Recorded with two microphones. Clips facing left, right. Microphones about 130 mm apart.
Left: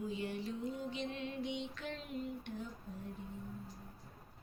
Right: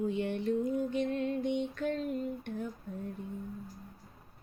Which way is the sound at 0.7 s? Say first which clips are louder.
Right 10 dB; 50° right (ahead or behind).